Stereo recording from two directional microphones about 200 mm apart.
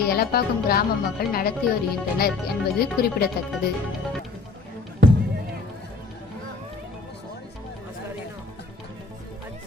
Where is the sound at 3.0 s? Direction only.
50° left (ahead or behind).